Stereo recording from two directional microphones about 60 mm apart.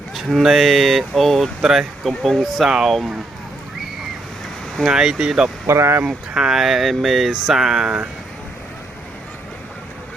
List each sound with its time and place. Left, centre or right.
0.3 s speech: centre
1.6 s speech: centre
2.0 s speech: centre
4.9 s speech: centre
5.6 s speech: right
6.1 s speech: centre